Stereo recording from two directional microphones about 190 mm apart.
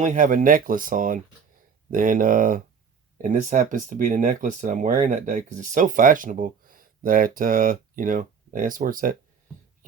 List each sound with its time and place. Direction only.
0.0 s speech: 40° right (ahead or behind)